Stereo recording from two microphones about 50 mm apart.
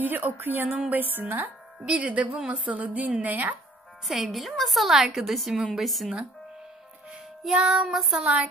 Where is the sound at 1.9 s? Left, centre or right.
Right.